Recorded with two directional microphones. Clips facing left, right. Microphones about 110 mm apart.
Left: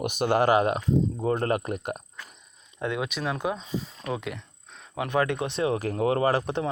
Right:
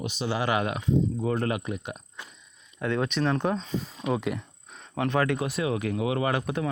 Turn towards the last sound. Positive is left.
turn(degrees=30)  # may be behind; listen again after turning